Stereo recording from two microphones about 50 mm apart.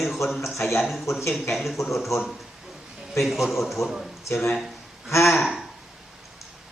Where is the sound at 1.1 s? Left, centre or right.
Left.